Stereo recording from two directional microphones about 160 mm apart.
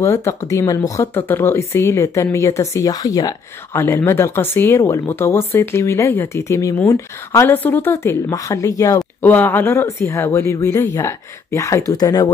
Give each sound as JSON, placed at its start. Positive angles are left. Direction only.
{"t": 0.0, "sound": "speech", "side_deg": 15}